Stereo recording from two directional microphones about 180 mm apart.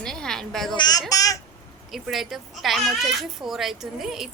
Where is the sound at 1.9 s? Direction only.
Centre (ahead or behind).